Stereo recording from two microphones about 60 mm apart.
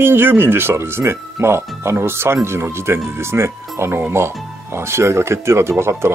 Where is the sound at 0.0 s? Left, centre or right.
Right.